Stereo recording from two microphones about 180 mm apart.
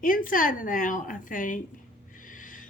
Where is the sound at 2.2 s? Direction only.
50° left (ahead or behind).